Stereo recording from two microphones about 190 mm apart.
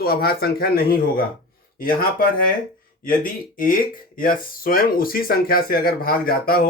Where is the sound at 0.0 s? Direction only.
55° left (ahead or behind).